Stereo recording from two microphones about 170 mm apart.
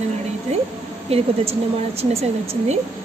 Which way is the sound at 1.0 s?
35° right (ahead or behind).